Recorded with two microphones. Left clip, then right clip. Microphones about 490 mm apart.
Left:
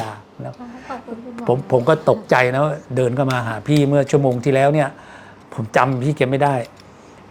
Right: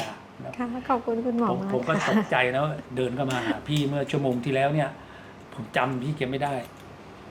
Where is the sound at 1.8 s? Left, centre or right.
Left.